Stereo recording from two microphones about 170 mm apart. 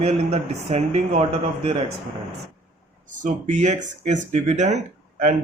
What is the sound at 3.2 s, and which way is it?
Speech, 45° right (ahead or behind).